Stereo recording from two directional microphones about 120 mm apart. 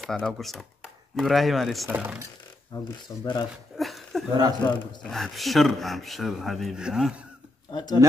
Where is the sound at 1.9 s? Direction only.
15° right (ahead or behind).